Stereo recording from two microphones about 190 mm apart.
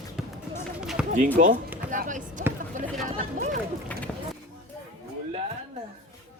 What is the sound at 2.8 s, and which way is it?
Chatter, 45° right (ahead or behind).